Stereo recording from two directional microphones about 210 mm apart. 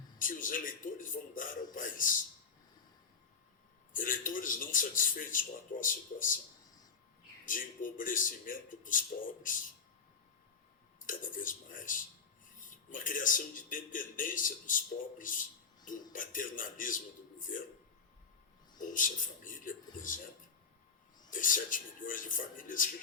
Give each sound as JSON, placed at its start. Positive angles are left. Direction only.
{"t": 0.2, "sound": "speech", "side_deg": 40}
{"t": 3.9, "sound": "speech", "side_deg": 40}
{"t": 7.4, "sound": "speech", "side_deg": 40}
{"t": 11.0, "sound": "speech", "side_deg": 40}
{"t": 15.2, "sound": "a sound", "side_deg": 40}
{"t": 16.1, "sound": "speech", "side_deg": 40}
{"t": 18.8, "sound": "speech", "side_deg": 40}
{"t": 21.2, "sound": "speech", "side_deg": 40}